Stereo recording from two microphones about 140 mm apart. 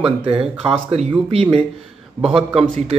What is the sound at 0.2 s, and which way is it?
Speech, 40° right (ahead or behind).